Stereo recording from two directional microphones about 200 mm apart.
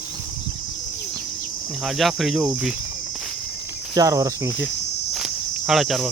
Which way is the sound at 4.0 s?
15° right (ahead or behind).